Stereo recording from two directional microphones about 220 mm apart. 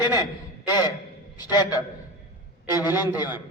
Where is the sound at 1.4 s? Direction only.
20° left (ahead or behind).